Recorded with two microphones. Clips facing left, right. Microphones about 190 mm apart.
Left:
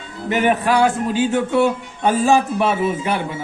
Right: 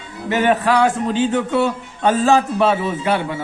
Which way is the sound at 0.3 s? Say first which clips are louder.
Right 1 dB; 10° left (ahead or behind).